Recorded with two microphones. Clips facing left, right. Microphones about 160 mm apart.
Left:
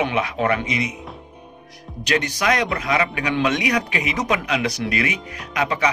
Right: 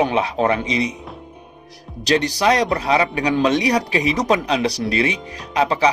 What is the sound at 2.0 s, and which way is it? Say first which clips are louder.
A man's voice: right 4 dB; 35° right (ahead or behind).